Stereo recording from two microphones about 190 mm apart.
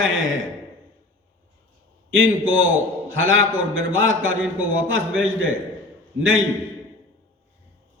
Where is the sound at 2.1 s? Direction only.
90° right.